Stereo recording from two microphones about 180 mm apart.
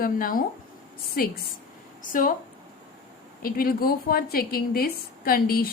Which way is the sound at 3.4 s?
55° left (ahead or behind).